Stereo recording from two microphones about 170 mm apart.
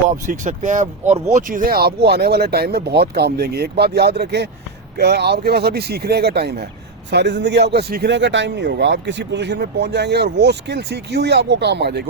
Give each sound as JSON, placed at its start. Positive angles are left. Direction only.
{"t": 0.3, "sound": "speech", "side_deg": -45}
{"t": 7.1, "sound": "speech", "side_deg": -90}